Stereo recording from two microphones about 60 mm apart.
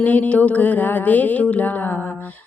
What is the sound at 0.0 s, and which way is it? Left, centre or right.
Music, left.